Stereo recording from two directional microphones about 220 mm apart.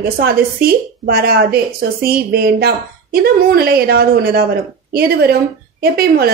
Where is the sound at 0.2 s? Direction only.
45° right (ahead or behind).